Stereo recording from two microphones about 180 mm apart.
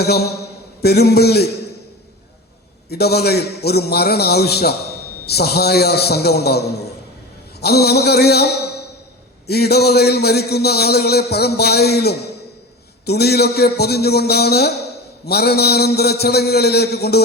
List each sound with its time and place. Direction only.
0.0 s a man's voice: 60° left (ahead or behind)
2.9 s a man's voice: 60° left (ahead or behind)
9.5 s a man's voice: 60° left (ahead or behind)